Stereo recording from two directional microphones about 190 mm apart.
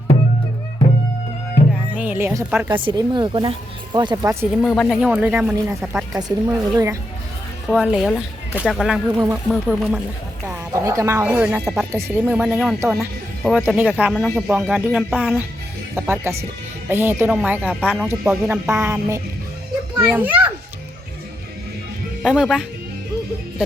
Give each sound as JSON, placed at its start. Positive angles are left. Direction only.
{"t": 1.9, "sound": "speech", "side_deg": -10}
{"t": 2.6, "sound": "speech", "side_deg": -25}
{"t": 4.6, "sound": "speech", "side_deg": 5}
{"t": 6.1, "sound": "speech", "side_deg": -20}
{"t": 7.7, "sound": "speech", "side_deg": -5}
{"t": 10.4, "sound": "speech", "side_deg": -15}
{"t": 22.2, "sound": "speech", "side_deg": -5}